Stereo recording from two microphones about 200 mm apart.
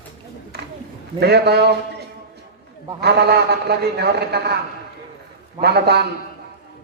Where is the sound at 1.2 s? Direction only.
55° right (ahead or behind).